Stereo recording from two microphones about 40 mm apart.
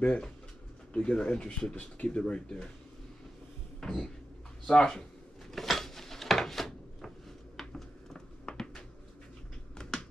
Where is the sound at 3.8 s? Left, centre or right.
Centre.